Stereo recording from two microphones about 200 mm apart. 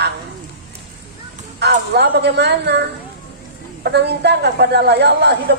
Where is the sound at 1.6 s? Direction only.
55° right (ahead or behind).